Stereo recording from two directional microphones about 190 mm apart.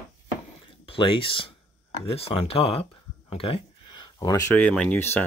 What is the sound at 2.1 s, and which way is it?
Speech, 30° left (ahead or behind).